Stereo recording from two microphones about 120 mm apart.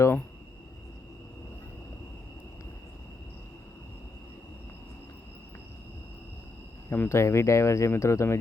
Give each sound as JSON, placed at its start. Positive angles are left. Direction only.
{"t": 0.0, "sound": "speech", "side_deg": 20}
{"t": 6.9, "sound": "speech", "side_deg": 20}